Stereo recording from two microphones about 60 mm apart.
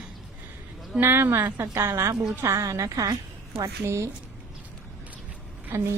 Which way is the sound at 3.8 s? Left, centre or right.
Right.